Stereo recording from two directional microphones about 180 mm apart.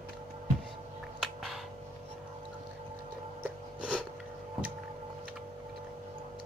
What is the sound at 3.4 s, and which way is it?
Music, 5° right (ahead or behind).